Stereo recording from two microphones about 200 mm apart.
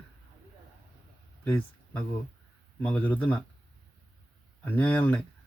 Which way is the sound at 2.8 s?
5° left (ahead or behind).